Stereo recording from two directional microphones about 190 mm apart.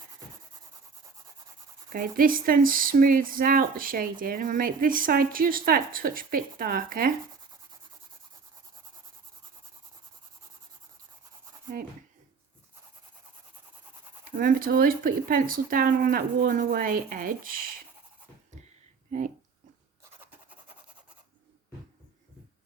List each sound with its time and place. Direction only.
1.9 s speech: 45° right (ahead or behind)
14.3 s speech: 45° right (ahead or behind)